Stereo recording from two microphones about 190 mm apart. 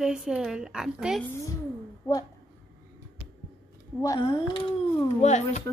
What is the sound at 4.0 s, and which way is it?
Speech, 20° left (ahead or behind).